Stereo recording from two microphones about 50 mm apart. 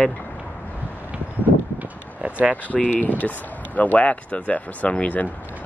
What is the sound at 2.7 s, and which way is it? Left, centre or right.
Speech, left.